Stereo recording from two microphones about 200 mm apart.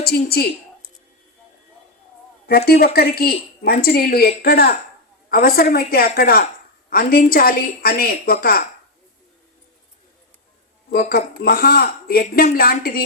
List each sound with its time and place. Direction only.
0.0 s a woman's voice: 50° left (ahead or behind)
2.5 s a woman's voice: 50° left (ahead or behind)
10.9 s a woman's voice: 50° left (ahead or behind)